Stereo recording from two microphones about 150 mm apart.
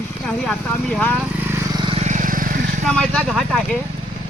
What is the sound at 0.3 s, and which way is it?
Speech, 5° left (ahead or behind).